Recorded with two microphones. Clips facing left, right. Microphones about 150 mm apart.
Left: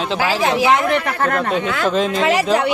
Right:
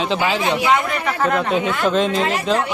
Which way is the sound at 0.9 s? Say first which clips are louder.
Left 2 dB; 60° left (ahead or behind).